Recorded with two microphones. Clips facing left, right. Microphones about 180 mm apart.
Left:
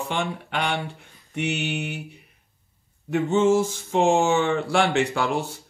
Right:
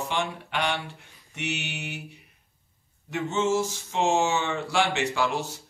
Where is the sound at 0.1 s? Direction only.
55° left (ahead or behind).